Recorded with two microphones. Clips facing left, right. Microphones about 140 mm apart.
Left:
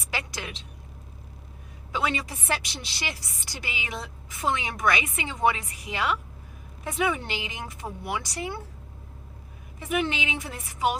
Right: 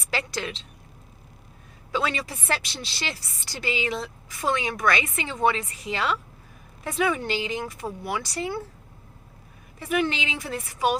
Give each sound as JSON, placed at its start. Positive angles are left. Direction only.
{"t": 0.1, "sound": "a woman's voice", "side_deg": 15}
{"t": 1.9, "sound": "a woman's voice", "side_deg": 15}
{"t": 9.8, "sound": "speech", "side_deg": 20}